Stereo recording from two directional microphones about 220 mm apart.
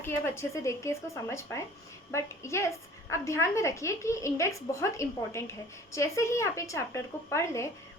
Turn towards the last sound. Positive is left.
turn(degrees=10)  # may be behind; listen again after turning